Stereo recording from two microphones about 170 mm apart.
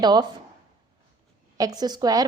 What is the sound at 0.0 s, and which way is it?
Speech, 25° right (ahead or behind).